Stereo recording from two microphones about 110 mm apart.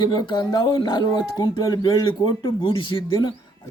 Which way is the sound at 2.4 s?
50° left (ahead or behind).